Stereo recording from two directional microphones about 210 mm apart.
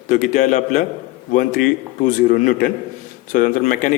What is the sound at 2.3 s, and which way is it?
Speech, 40° left (ahead or behind).